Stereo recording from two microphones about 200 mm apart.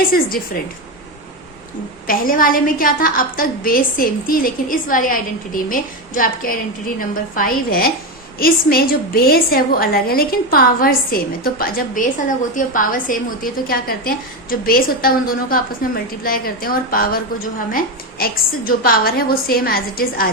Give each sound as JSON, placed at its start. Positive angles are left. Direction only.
{"t": 0.0, "sound": "a woman's voice", "side_deg": 45}
{"t": 2.0, "sound": "a woman's voice", "side_deg": 45}